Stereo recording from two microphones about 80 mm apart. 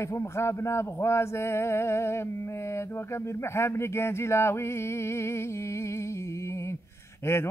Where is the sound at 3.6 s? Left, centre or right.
Left.